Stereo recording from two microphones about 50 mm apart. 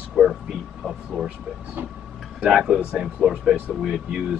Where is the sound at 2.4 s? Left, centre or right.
Centre.